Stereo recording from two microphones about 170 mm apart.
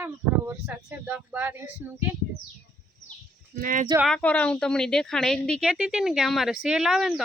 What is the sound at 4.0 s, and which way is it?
A woman's voice, 5° left (ahead or behind).